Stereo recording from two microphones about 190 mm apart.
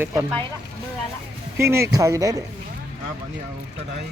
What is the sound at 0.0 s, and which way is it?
Speech, 15° right (ahead or behind).